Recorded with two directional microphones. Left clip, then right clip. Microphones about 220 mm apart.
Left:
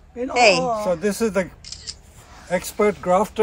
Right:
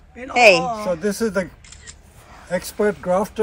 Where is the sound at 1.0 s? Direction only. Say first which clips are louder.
Even; 20° left (ahead or behind).